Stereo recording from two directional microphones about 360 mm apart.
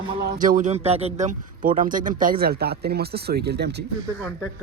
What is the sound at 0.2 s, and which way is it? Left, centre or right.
Speech, right.